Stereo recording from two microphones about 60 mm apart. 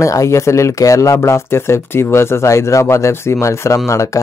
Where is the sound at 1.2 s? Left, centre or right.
Left.